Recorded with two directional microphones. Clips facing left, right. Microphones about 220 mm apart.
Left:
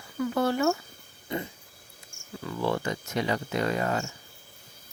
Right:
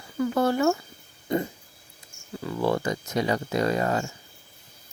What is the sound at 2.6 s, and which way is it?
Speech, 40° right (ahead or behind).